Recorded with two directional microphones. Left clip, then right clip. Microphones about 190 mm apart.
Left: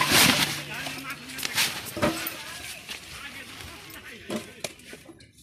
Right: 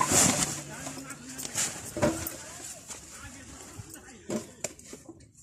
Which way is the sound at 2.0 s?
15° right (ahead or behind).